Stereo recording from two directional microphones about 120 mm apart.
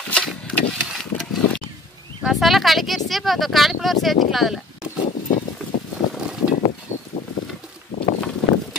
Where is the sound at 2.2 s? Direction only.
Centre (ahead or behind).